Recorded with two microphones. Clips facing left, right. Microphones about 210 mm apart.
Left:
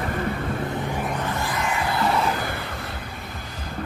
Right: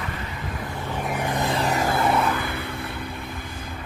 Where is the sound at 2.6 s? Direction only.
55° right (ahead or behind).